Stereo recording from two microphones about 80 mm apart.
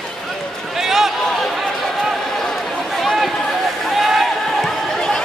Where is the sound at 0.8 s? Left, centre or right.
Centre.